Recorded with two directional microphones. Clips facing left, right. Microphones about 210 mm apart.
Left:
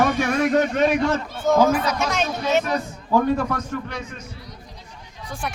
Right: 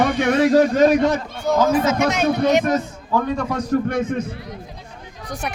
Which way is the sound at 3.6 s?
40° right (ahead or behind).